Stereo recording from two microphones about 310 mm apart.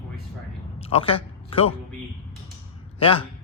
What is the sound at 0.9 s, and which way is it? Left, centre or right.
Speech, centre.